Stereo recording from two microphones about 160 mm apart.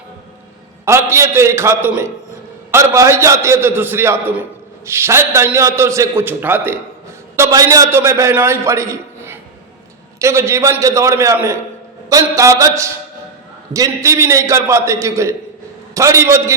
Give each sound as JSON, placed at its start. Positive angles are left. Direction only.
{"t": 0.9, "sound": "a man's voice", "side_deg": -15}